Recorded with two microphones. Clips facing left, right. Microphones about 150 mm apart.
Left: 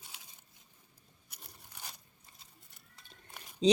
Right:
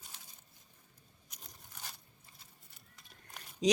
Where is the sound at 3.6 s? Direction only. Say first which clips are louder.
Left 4 dB; 30° left (ahead or behind).